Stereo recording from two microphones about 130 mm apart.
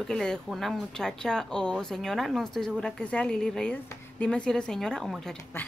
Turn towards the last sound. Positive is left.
turn(degrees=15)  # may be behind; listen again after turning